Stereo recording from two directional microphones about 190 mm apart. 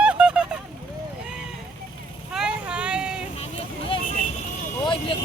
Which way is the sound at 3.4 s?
30° left (ahead or behind).